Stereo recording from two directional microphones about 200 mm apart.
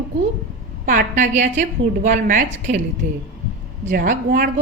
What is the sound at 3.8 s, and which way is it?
Speech, 40° right (ahead or behind).